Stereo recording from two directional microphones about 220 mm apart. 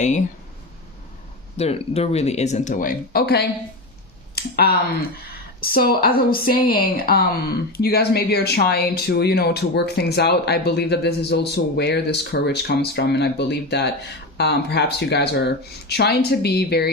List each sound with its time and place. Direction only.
1.5 s speech: 30° left (ahead or behind); by 16.9 s 45° left (ahead or behind)